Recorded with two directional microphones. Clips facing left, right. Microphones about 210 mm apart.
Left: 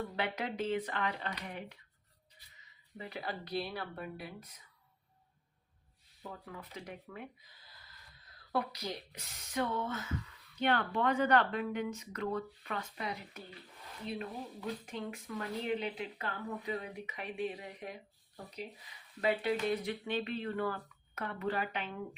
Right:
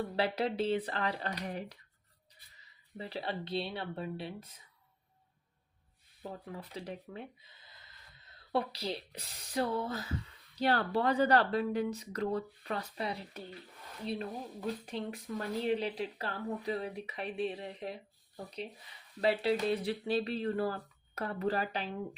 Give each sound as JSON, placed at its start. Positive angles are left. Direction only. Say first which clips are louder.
{"t": 0.2, "sound": "speech", "louder": "right 6 dB", "side_deg": -35}
{"t": 6.2, "sound": "speech", "louder": "right 3 dB", "side_deg": -35}
{"t": 19.2, "sound": "speech", "louder": "right 2 dB", "side_deg": -30}